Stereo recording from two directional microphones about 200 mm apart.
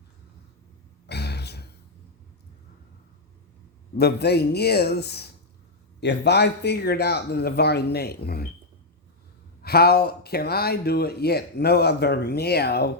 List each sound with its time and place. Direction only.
1.0 s a sound: 55° left (ahead or behind)
3.9 s a man's voice: 55° left (ahead or behind)
9.6 s speech: 50° left (ahead or behind)